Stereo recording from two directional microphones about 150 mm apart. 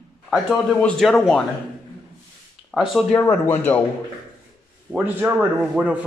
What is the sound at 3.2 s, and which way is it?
Speech, 15° left (ahead or behind).